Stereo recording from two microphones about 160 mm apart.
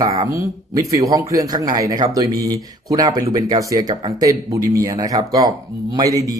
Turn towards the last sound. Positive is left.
turn(degrees=-20)  # may be behind; listen again after turning